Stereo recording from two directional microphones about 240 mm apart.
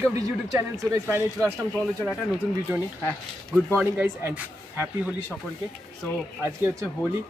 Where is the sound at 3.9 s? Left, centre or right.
Centre.